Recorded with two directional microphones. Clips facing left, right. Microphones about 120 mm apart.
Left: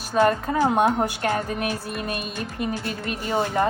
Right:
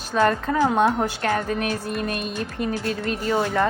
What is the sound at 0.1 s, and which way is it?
A woman's voice, 10° left (ahead or behind).